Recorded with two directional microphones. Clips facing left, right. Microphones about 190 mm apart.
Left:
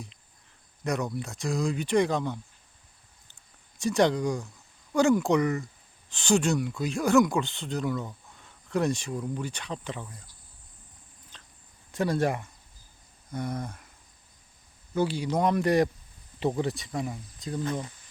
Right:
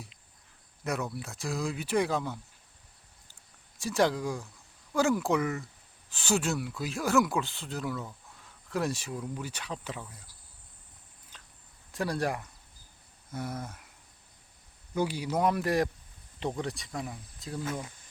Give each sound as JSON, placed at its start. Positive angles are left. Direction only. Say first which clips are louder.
{"t": 0.9, "sound": "speech", "louder": "left 4 dB", "side_deg": 0}
{"t": 3.8, "sound": "speech", "louder": "left 4 dB", "side_deg": 0}
{"t": 11.3, "sound": "a sound", "louder": "left 1 dB", "side_deg": -10}
{"t": 11.9, "sound": "speech", "louder": "left 5 dB", "side_deg": 0}
{"t": 14.9, "sound": "speech", "louder": "left 3 dB", "side_deg": -10}